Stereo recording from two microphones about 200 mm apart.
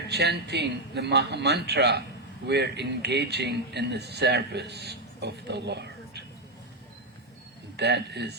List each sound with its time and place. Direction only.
0.1 s speech: 55° right (ahead or behind)
7.8 s speech: 55° right (ahead or behind)